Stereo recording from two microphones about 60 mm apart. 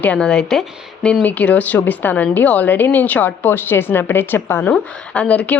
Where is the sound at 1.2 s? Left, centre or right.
Left.